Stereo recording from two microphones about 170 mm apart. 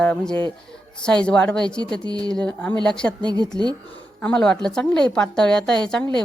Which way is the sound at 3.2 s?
25° right (ahead or behind).